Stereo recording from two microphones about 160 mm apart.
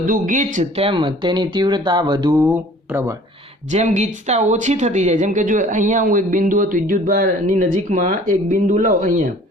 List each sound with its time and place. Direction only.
0.0 s speech: 55° right (ahead or behind)
0.8 s speech: 30° right (ahead or behind)
3.7 s a man's voice: 50° right (ahead or behind)